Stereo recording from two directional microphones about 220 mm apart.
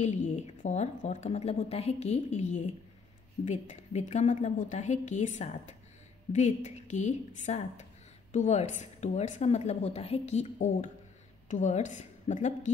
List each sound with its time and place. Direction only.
0.0 s a woman's voice: 30° left (ahead or behind)